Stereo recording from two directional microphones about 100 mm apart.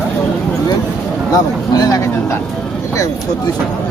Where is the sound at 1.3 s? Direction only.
40° left (ahead or behind).